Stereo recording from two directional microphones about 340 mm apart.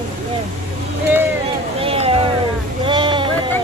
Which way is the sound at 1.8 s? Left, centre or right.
Centre.